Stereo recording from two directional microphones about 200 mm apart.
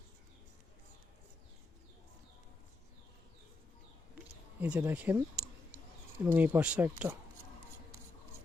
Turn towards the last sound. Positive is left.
turn(degrees=-10)  # may be behind; listen again after turning